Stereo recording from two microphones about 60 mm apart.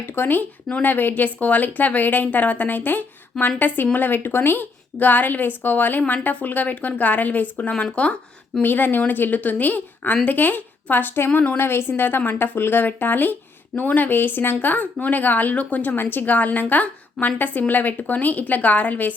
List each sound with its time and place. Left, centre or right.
0.0 s speech: left
7.5 s speech: centre
8.6 s speech: left